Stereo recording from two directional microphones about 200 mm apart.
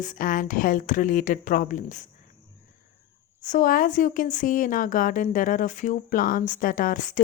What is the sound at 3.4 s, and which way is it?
A woman's voice, 40° left (ahead or behind).